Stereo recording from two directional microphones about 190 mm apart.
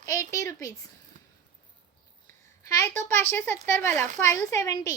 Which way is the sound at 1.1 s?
45° right (ahead or behind).